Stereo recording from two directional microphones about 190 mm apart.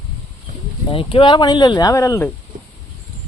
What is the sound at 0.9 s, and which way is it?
Speech, 25° left (ahead or behind).